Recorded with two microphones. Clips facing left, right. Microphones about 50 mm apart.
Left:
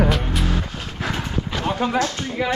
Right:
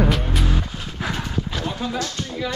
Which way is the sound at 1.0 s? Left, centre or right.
Centre.